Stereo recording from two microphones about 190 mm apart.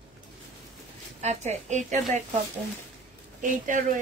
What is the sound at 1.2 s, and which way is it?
Speech, 35° right (ahead or behind).